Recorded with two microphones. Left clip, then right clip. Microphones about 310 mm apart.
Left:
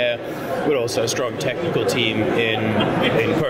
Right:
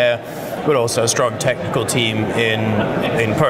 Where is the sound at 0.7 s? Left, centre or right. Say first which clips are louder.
Right 5 dB; right.